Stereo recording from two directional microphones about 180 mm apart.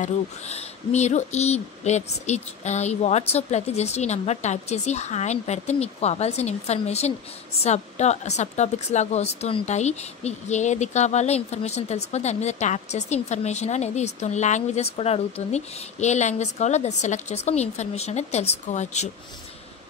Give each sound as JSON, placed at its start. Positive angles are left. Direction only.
{"t": 0.0, "sound": "a woman's voice", "side_deg": 40}